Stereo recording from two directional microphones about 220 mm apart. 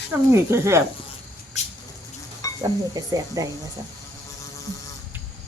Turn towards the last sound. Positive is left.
turn(degrees=-15)  # may be behind; listen again after turning